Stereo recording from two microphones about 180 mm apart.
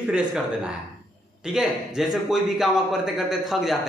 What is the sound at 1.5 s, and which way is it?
Speech, 5° right (ahead or behind).